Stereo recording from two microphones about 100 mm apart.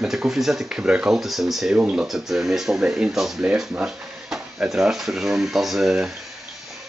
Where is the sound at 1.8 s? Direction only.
15° right (ahead or behind).